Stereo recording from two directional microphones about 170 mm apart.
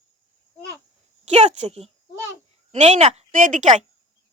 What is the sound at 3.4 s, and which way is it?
Speech, 50° right (ahead or behind).